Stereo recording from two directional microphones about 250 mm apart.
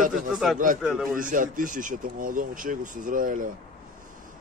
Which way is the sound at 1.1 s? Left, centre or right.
Right.